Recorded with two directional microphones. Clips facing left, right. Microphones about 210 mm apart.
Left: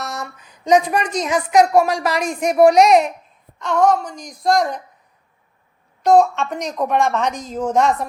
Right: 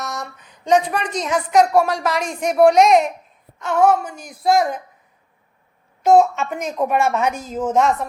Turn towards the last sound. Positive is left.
turn(degrees=0)  # may be behind; listen again after turning